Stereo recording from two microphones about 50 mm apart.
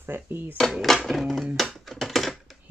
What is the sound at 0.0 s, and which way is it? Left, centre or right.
Speech, right.